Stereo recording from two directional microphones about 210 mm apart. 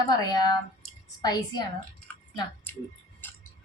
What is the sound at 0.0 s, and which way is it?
Speech, 20° left (ahead or behind).